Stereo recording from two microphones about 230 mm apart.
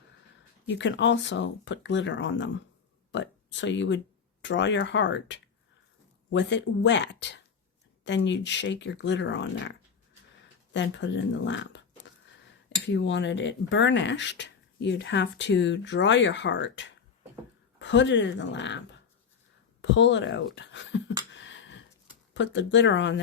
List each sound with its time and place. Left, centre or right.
0.7 s speech: left
12.8 s speech: left
21.3 s a sound: left
22.4 s speech: left